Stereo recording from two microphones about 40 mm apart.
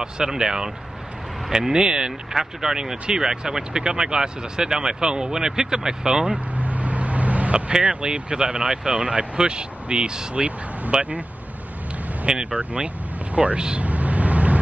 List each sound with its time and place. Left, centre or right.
0.0 s speech: centre
6.3 s vehicle: right
7.7 s speech: right
12.3 s speech: right
13.6 s speech: right
13.8 s vehicle: right